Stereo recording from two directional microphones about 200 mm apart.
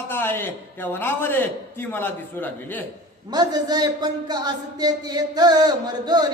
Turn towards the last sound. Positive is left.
turn(degrees=-20)  # may be behind; listen again after turning